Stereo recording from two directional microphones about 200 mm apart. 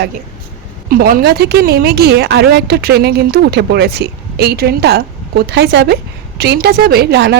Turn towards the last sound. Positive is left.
turn(degrees=-55)  # may be behind; listen again after turning